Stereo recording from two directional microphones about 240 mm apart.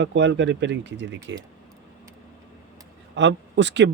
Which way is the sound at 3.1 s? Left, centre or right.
Right.